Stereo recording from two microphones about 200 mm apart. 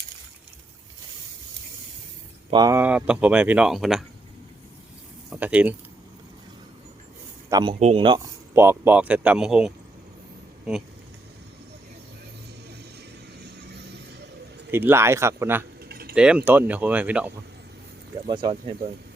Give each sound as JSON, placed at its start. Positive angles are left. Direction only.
{"t": 2.5, "sound": "speech", "side_deg": -20}
{"t": 5.3, "sound": "speech", "side_deg": -5}
{"t": 7.5, "sound": "speech", "side_deg": -25}
{"t": 14.7, "sound": "speech", "side_deg": -10}
{"t": 15.8, "sound": "keys jangling", "side_deg": -50}
{"t": 16.1, "sound": "speech", "side_deg": -5}
{"t": 18.3, "sound": "speech", "side_deg": -20}